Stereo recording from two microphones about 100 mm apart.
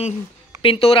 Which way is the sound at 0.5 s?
65° left (ahead or behind).